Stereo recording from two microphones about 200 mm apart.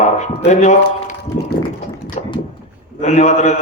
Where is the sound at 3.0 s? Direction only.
35° left (ahead or behind).